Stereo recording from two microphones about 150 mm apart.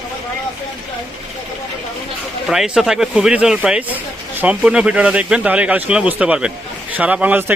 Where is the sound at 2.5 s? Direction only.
5° right (ahead or behind).